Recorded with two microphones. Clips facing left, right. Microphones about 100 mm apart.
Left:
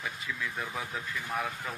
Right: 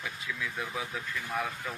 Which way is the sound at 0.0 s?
Centre (ahead or behind).